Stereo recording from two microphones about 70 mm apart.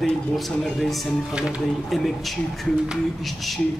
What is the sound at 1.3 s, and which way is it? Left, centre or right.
Speech, centre.